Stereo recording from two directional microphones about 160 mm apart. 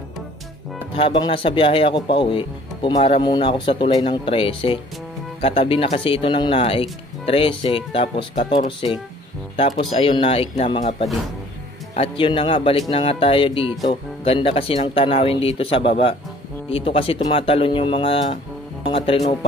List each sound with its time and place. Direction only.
0.9 s a man's voice: 30° left (ahead or behind)